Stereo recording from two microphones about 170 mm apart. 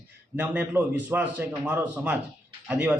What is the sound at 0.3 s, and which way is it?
A man's voice, 10° right (ahead or behind).